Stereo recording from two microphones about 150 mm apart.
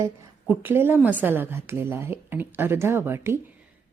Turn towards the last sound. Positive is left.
turn(degrees=-15)  # may be behind; listen again after turning